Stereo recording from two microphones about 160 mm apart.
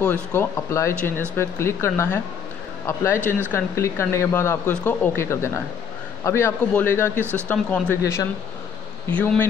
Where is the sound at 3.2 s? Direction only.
15° right (ahead or behind).